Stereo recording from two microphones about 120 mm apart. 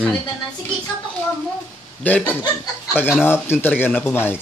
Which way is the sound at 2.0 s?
15° left (ahead or behind).